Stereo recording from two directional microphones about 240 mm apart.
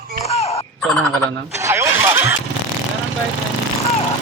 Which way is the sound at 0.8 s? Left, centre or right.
Centre.